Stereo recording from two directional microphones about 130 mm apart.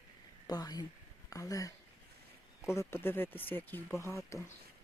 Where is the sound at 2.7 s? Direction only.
20° left (ahead or behind).